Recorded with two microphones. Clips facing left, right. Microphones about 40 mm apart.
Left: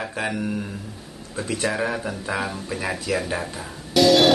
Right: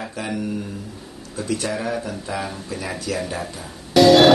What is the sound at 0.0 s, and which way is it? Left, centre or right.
Speech, centre.